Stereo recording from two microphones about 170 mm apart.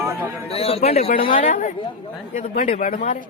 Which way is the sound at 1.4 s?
45° left (ahead or behind).